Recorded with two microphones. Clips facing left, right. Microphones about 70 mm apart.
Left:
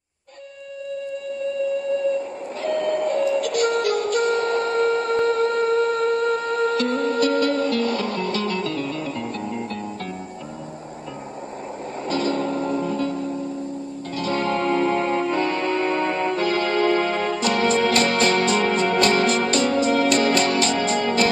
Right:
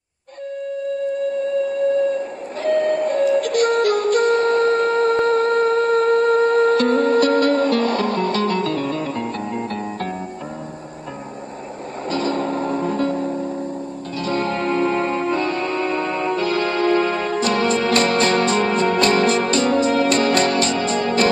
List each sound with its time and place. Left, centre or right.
2.6 s music: right
12.1 s music: right